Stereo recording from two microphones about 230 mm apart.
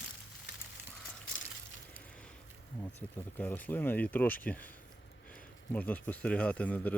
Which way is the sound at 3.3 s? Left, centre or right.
Centre.